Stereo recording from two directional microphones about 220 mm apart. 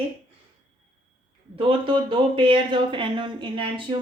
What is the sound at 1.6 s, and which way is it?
Speech, 25° right (ahead or behind).